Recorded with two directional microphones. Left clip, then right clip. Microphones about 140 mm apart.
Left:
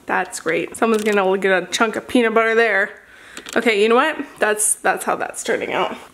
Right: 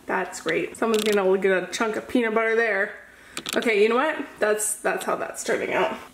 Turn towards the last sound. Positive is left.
turn(degrees=35)  # may be behind; listen again after turning